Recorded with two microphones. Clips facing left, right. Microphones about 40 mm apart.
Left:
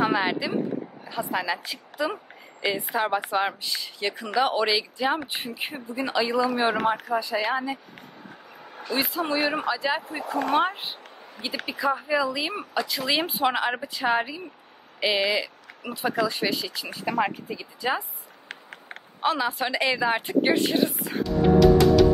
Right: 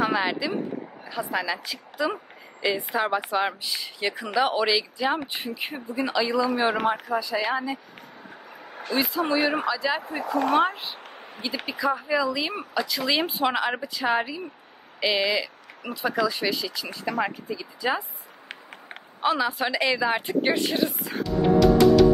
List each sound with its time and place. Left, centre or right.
0.0 s speech: centre
8.9 s speech: centre
11.6 s speech: centre
16.9 s speech: centre
19.2 s a woman's voice: centre